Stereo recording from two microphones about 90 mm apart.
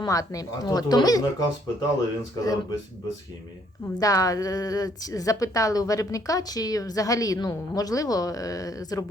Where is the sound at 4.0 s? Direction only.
40° left (ahead or behind).